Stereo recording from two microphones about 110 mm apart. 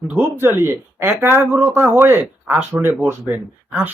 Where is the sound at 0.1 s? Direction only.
20° right (ahead or behind).